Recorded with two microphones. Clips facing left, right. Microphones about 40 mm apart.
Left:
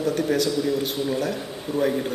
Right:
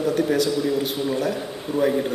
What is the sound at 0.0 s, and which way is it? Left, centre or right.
A man's voice, centre.